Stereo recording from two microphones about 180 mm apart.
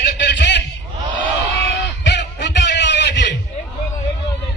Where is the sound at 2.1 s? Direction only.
75° left (ahead or behind).